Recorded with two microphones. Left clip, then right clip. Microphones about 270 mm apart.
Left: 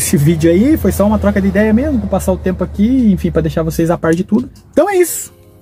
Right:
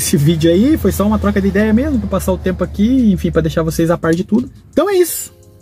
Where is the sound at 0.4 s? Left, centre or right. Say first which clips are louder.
Left 1 dB; left.